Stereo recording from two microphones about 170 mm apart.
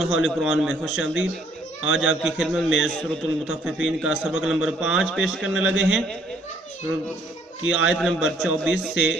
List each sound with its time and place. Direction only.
0.0 s a man's voice: 5° right (ahead or behind)
7.7 s a man's voice: centre (ahead or behind)